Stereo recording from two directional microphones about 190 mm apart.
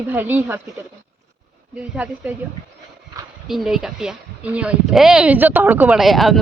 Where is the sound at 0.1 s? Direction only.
10° right (ahead or behind).